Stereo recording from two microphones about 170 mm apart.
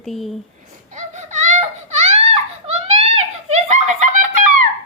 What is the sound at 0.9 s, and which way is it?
Baby cry, 45° right (ahead or behind).